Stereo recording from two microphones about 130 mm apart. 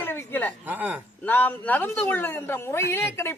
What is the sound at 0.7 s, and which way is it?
Speech, 15° right (ahead or behind).